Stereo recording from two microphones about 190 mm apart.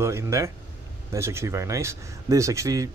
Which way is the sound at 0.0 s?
15° right (ahead or behind).